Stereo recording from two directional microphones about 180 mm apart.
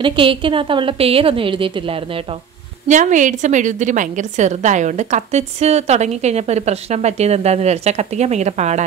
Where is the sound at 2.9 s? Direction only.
45° right (ahead or behind).